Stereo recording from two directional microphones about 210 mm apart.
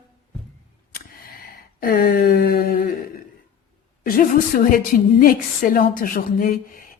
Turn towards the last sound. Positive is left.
turn(degrees=40)  # may be behind; listen again after turning